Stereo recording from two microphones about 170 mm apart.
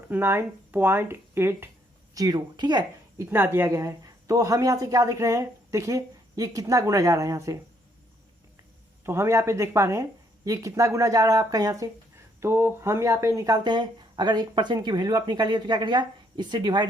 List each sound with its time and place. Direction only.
0.1 s speech: 15° right (ahead or behind)
3.2 s speech: 15° right (ahead or behind)
9.0 s speech: 15° right (ahead or behind)